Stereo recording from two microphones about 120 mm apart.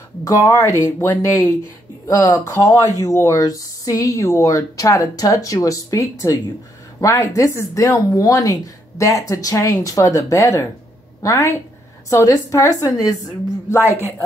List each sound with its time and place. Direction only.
0.2 s speech: 30° left (ahead or behind)